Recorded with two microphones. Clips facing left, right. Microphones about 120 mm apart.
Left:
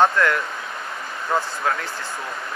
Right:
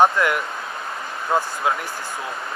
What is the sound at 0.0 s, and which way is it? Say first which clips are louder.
Speech: right 1 dB; 15° right (ahead or behind).